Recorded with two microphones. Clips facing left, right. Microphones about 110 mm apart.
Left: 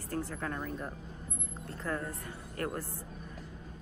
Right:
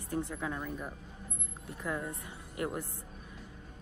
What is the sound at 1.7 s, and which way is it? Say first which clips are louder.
Speech: even; 15° right (ahead or behind).